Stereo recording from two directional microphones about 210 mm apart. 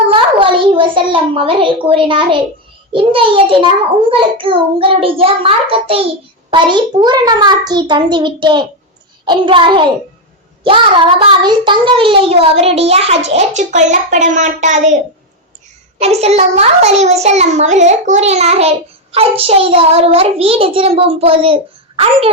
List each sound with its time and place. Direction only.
0.1 s a child's voice: 25° right (ahead or behind)
16.0 s a child's voice: 30° right (ahead or behind)